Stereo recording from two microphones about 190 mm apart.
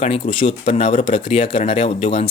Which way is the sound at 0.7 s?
40° left (ahead or behind).